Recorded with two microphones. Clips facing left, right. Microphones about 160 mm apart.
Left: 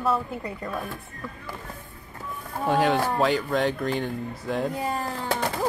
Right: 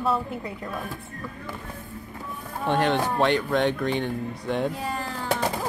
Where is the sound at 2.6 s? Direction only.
Centre (ahead or behind).